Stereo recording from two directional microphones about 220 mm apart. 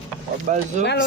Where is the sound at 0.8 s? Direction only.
50° left (ahead or behind).